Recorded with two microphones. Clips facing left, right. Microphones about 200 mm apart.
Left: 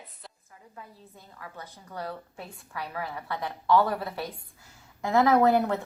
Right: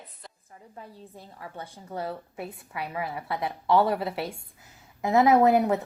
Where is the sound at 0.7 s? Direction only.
30° right (ahead or behind).